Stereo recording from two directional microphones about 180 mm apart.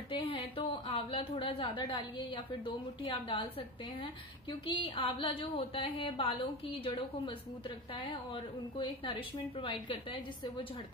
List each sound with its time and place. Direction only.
0.1 s a woman's voice: 30° left (ahead or behind)